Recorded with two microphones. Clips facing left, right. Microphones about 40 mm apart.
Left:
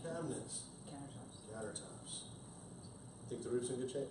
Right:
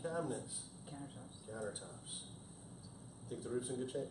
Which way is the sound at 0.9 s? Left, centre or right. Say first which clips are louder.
Right 1 dB; centre.